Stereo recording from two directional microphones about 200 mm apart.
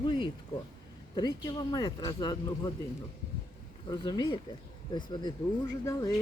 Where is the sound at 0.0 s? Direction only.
25° left (ahead or behind).